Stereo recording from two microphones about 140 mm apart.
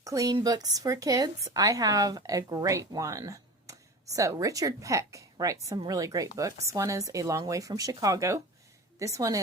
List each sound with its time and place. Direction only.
0.0 s a woman's voice: 25° right (ahead or behind)